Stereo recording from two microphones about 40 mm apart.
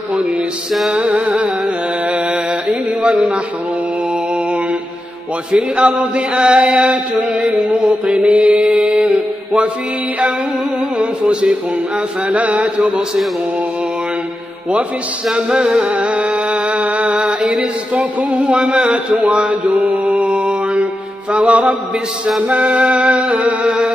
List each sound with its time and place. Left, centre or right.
0.9 s music: right
2.7 s mantra: right
5.5 s chant: right
7.9 s mantra: right
11.0 s mantra: right
16.0 s mantra: right
18.5 s chant: right
19.5 s mantra: right
23.6 s chant: right